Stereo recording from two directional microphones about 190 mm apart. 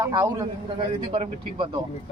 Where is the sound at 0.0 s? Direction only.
20° right (ahead or behind).